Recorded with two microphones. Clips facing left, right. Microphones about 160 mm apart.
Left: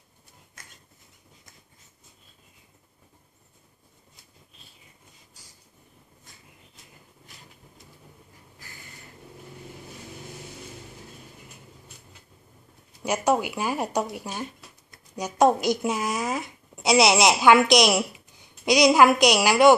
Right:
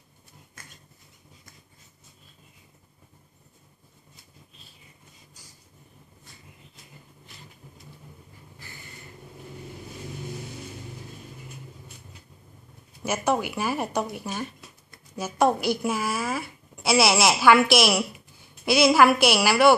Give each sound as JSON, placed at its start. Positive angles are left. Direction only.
{"t": 13.0, "sound": "a woman's voice", "side_deg": 15}